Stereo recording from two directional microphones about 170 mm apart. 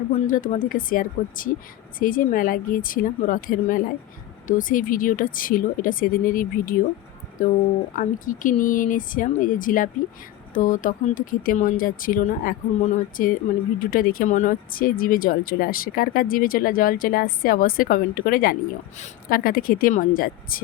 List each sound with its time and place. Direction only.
0.3 s speech: 50° left (ahead or behind)